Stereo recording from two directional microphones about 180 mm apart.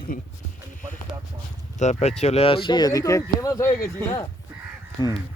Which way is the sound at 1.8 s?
40° left (ahead or behind).